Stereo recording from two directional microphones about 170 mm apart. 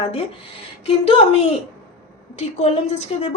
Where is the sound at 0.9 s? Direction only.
35° left (ahead or behind).